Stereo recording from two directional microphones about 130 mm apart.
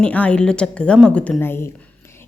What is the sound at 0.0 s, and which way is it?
A woman's voice, 10° left (ahead or behind).